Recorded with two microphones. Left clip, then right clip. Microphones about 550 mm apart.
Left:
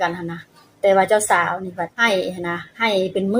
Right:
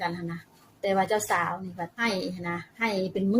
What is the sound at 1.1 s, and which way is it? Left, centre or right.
A woman's voice, right.